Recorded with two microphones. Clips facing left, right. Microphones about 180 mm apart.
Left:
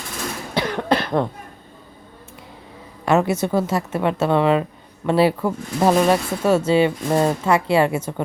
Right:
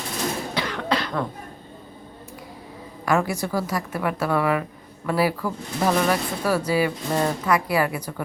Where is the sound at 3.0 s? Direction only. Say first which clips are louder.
Left 5 dB; 25° left (ahead or behind).